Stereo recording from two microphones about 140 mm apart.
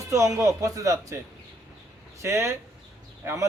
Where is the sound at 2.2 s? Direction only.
20° right (ahead or behind).